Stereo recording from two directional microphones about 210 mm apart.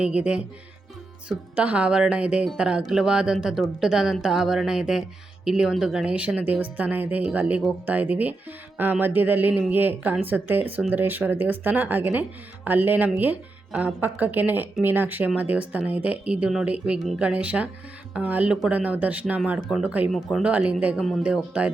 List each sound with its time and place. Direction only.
0.0 s speech: 5° right (ahead or behind)